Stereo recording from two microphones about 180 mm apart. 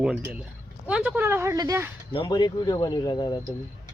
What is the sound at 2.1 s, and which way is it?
Speech, 25° left (ahead or behind).